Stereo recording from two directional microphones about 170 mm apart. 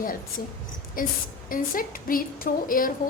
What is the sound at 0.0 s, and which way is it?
A woman's voice, 55° left (ahead or behind).